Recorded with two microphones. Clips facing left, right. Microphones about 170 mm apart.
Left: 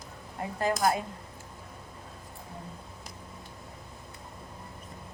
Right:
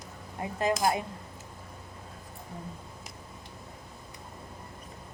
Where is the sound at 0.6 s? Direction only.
20° right (ahead or behind).